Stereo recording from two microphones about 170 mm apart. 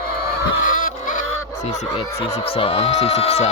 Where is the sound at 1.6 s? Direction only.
45° left (ahead or behind).